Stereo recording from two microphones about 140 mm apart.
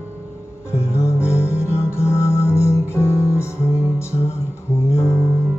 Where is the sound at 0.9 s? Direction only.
20° left (ahead or behind).